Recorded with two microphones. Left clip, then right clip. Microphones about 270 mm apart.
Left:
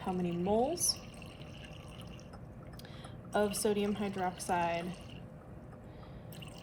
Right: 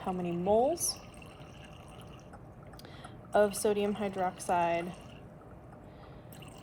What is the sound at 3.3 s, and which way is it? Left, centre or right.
A woman's voice, right.